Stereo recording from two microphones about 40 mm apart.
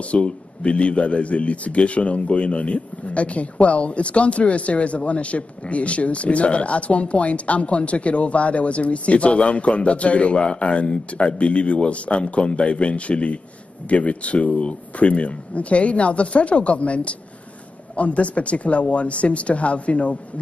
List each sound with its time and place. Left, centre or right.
0.1 s speech: left